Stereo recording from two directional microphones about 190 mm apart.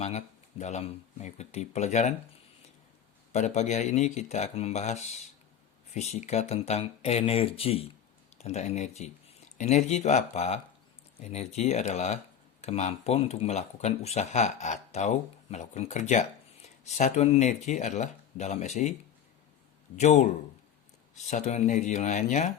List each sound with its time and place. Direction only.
0.0 s speech: 35° left (ahead or behind)
3.3 s speech: 35° left (ahead or behind)
20.0 s speech: 40° left (ahead or behind)